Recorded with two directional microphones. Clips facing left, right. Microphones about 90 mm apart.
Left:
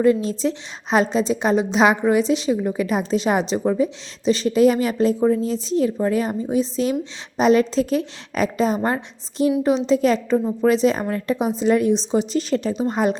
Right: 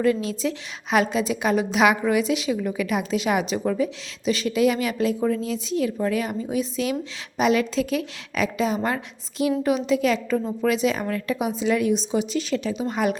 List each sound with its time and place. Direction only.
0.0 s a woman's voice: 30° left (ahead or behind)
10.3 s a woman's voice: 20° left (ahead or behind)
10.7 s a woman's voice: 35° left (ahead or behind)